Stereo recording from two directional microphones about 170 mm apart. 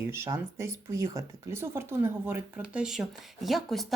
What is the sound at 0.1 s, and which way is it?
Speech, 15° right (ahead or behind).